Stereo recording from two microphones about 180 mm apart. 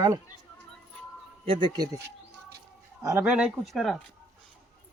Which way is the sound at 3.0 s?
10° right (ahead or behind).